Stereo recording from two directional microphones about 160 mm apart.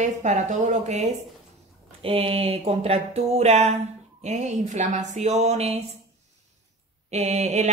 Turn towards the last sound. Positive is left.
turn(degrees=-40)  # may be behind; listen again after turning